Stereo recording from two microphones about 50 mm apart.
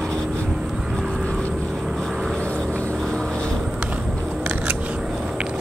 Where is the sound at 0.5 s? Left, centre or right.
Centre.